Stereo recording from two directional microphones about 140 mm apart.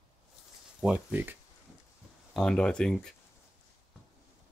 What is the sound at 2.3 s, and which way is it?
Speech, 5° left (ahead or behind).